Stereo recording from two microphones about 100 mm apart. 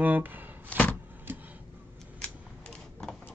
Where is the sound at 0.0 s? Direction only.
15° right (ahead or behind).